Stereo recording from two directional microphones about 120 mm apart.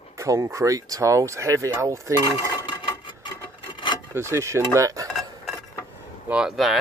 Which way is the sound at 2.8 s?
40° left (ahead or behind).